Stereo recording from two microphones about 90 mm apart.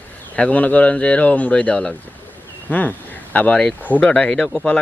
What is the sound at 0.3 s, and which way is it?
Speech, 15° left (ahead or behind).